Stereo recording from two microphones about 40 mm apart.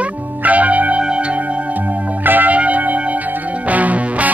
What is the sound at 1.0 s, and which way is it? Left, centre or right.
Music, right.